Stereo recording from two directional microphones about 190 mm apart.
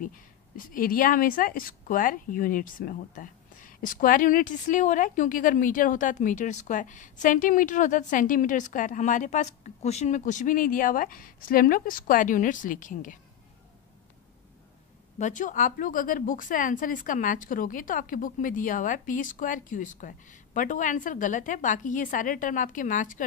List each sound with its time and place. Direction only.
0.0 s a woman's voice: 45° left (ahead or behind)
15.1 s a woman's voice: 40° left (ahead or behind)